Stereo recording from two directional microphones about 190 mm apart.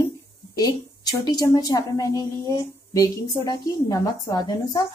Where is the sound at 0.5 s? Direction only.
20° left (ahead or behind).